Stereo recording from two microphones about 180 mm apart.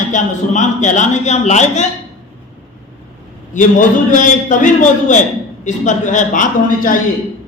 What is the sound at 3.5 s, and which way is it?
A man's voice, 45° left (ahead or behind).